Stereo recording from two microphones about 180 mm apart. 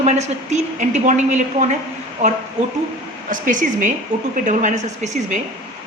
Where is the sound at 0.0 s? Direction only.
40° right (ahead or behind).